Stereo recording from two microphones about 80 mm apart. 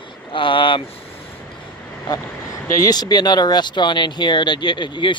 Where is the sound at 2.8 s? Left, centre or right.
Left.